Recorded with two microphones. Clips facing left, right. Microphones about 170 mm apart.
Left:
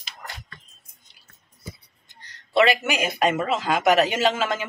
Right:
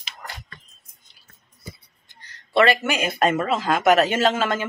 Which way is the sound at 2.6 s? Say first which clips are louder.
Right 1 dB; 10° left (ahead or behind).